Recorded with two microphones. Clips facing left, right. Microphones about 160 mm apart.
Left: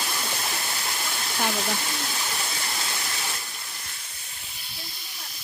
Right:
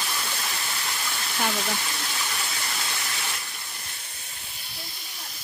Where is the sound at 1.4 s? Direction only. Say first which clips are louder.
Left 1 dB; 5° left (ahead or behind).